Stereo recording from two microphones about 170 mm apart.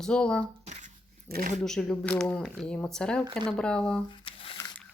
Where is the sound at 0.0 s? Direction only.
5° left (ahead or behind).